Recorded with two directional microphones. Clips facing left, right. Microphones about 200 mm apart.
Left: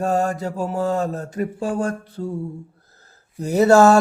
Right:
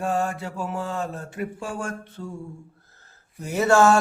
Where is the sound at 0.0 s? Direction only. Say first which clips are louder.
Left 5 dB; 40° left (ahead or behind).